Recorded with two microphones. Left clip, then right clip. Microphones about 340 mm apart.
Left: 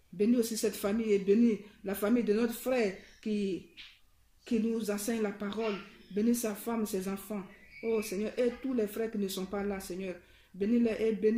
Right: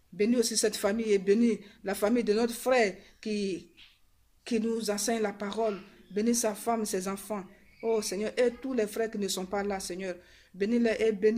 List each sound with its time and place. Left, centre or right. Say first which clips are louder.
0.2 s a man's voice: right 3 dB; right